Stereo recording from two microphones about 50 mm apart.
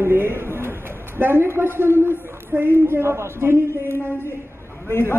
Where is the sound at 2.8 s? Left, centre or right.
Right.